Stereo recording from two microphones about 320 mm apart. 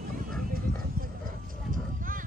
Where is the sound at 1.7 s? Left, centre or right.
Right.